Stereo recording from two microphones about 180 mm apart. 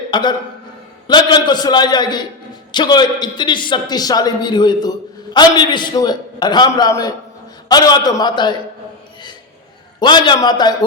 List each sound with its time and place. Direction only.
0.1 s a man's voice: 25° left (ahead or behind)
10.0 s a man's voice: 25° left (ahead or behind)